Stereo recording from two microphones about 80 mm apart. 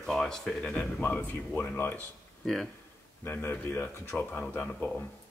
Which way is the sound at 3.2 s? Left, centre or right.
Left.